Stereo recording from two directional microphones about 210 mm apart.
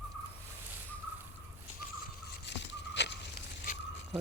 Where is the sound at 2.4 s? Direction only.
55° left (ahead or behind).